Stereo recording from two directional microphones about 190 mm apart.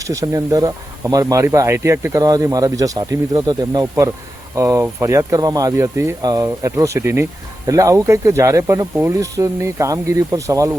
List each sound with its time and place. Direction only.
0.1 s speech: 15° right (ahead or behind)